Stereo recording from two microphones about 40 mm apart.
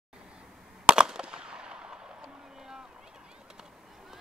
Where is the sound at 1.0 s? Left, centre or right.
Centre.